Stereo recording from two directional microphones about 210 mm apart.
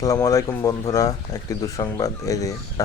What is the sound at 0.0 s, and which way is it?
Speech, 15° left (ahead or behind).